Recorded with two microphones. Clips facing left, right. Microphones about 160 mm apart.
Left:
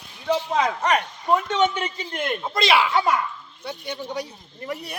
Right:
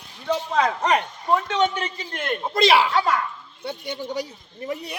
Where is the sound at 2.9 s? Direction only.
15° left (ahead or behind).